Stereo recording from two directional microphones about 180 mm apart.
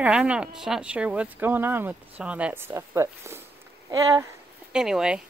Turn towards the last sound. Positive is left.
turn(degrees=-5)  # may be behind; listen again after turning